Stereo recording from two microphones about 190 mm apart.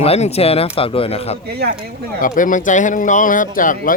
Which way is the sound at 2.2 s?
45° left (ahead or behind).